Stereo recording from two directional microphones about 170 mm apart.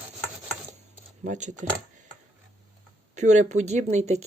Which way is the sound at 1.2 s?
45° right (ahead or behind).